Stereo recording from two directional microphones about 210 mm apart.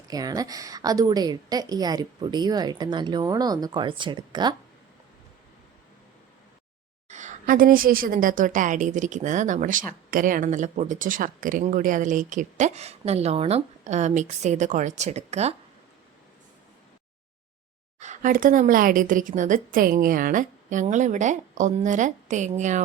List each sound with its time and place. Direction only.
0.1 s a woman's voice: 15° right (ahead or behind)
7.1 s a woman's voice: 35° right (ahead or behind)
18.0 s a woman's voice: 35° right (ahead or behind)